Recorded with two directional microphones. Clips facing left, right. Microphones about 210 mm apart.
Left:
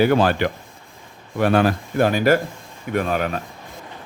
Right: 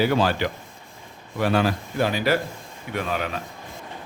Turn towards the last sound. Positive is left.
turn(degrees=45)  # may be behind; listen again after turning